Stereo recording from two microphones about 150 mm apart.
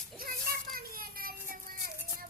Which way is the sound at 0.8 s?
75° right (ahead or behind).